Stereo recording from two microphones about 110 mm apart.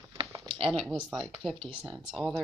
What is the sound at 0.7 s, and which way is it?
Speech, centre (ahead or behind).